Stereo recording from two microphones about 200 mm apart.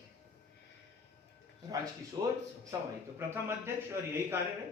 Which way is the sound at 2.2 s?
20° right (ahead or behind).